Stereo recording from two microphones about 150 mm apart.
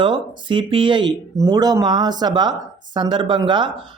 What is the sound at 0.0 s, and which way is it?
Speech, 35° right (ahead or behind).